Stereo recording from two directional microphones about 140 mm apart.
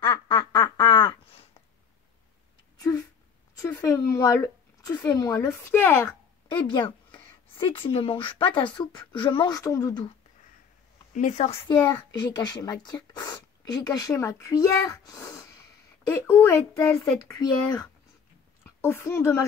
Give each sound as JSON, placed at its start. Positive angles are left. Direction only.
{"t": 0.0, "sound": "quack", "side_deg": 35}
{"t": 3.6, "sound": "speech", "side_deg": 20}
{"t": 6.7, "sound": "speech", "side_deg": 35}
{"t": 9.6, "sound": "speech", "side_deg": 20}
{"t": 11.1, "sound": "a woman's voice", "side_deg": 60}
{"t": 11.9, "sound": "a woman's voice", "side_deg": 30}